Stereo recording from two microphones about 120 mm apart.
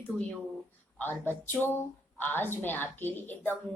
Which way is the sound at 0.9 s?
15° left (ahead or behind).